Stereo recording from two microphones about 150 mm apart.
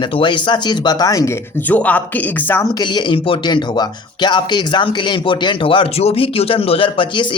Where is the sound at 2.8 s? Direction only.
30° left (ahead or behind).